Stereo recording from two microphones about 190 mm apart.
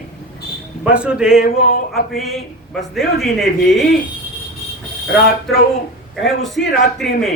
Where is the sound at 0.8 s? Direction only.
5° right (ahead or behind).